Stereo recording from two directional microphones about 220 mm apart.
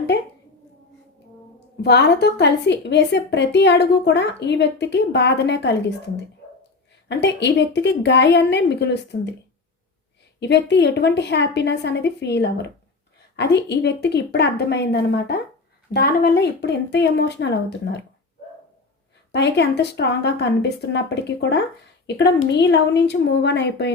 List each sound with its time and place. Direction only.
1.8 s a woman's voice: 50° left (ahead or behind)
10.4 s a woman's voice: 50° left (ahead or behind)
19.3 s a woman's voice: 50° left (ahead or behind)